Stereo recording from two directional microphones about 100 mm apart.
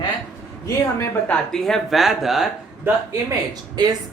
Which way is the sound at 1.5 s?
5° left (ahead or behind).